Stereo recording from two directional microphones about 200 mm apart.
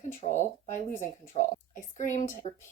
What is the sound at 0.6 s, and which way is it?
A woman's voice, 40° left (ahead or behind).